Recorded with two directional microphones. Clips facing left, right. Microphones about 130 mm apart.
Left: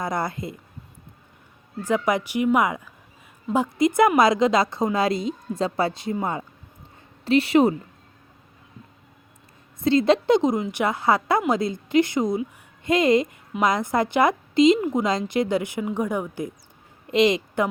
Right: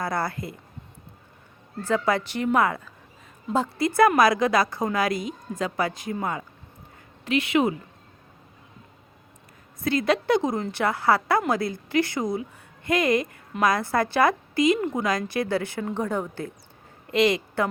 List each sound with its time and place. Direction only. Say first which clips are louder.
0.0 s a woman's voice: left 1 dB; 20° left (ahead or behind)
1.8 s a woman's voice: left 1 dB; 15° left (ahead or behind); by 7.8 s 35° left (ahead or behind)
9.8 s a woman's voice: left 5 dB; 25° left (ahead or behind)